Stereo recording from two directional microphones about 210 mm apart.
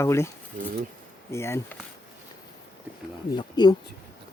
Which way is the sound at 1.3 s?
10° left (ahead or behind).